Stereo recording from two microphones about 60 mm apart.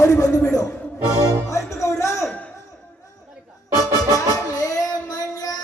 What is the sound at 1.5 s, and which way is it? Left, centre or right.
Music, left.